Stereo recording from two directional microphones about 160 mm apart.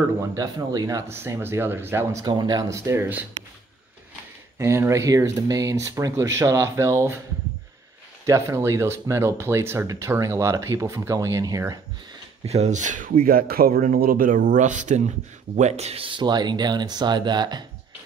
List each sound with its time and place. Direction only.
0.3 s speech: 25° right (ahead or behind)
4.6 s speech: 15° right (ahead or behind)
8.3 s speech: 20° right (ahead or behind)
12.4 s speech: 45° right (ahead or behind); by 17.6 s 25° right (ahead or behind)